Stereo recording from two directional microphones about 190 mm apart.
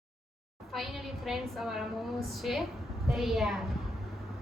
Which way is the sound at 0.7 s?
Centre (ahead or behind).